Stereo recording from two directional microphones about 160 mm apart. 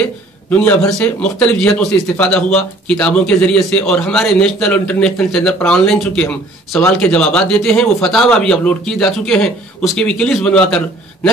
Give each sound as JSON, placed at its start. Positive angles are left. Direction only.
{"t": 0.0, "sound": "a man's voice", "side_deg": 10}